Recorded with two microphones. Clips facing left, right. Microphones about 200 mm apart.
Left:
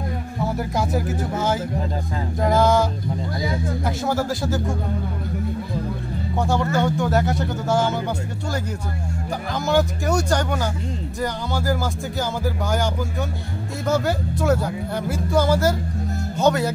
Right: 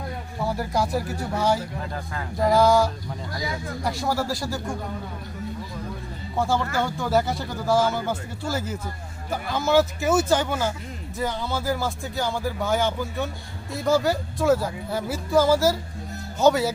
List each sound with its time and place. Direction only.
0.4 s speech: centre (ahead or behind)
6.3 s speech: centre (ahead or behind)
9.5 s speech: centre (ahead or behind)